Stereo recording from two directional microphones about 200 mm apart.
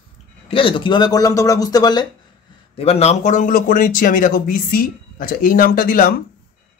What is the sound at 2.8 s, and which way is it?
Speech, 30° left (ahead or behind).